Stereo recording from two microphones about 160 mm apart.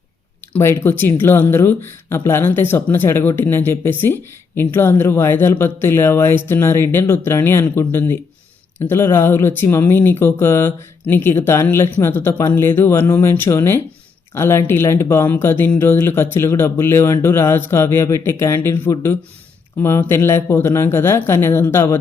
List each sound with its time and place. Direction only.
0.5 s speech: 15° left (ahead or behind)